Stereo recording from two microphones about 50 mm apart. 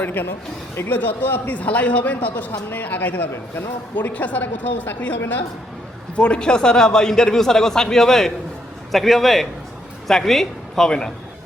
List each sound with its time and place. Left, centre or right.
0.0 s a man's voice: left
2.3 s a man's voice: left
6.1 s a man's voice: left